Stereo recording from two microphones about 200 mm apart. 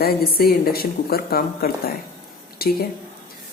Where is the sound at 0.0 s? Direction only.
50° left (ahead or behind).